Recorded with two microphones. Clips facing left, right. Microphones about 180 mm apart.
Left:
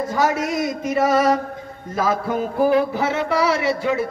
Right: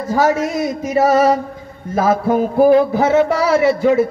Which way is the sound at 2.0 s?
50° right (ahead or behind).